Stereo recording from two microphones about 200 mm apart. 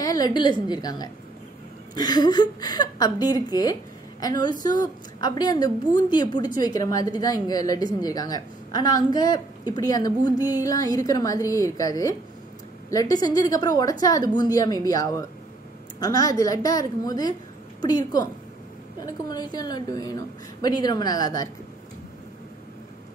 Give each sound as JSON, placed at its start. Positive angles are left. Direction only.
{"t": 0.0, "sound": "a woman's voice", "side_deg": 20}